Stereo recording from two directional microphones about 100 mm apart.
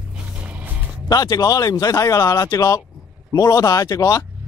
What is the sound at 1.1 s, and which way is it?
Speech, 40° left (ahead or behind).